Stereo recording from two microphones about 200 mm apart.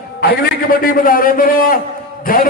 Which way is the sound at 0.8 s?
45° left (ahead or behind).